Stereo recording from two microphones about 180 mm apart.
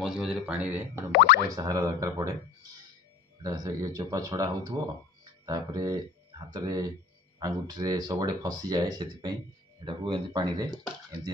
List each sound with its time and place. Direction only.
0.0 s speech: centre (ahead or behind)
1.1 s speech: 60° left (ahead or behind)
1.5 s speech: 20° right (ahead or behind)
3.4 s speech: 20° right (ahead or behind)